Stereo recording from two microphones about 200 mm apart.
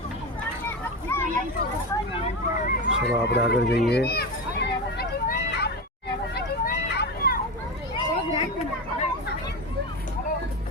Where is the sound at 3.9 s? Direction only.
50° left (ahead or behind).